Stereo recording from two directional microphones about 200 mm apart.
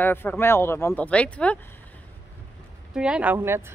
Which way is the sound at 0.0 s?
10° left (ahead or behind).